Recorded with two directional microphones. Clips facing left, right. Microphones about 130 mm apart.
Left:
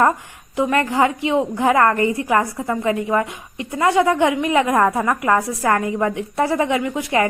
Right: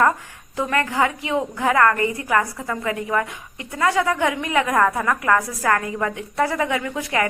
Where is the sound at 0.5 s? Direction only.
20° left (ahead or behind).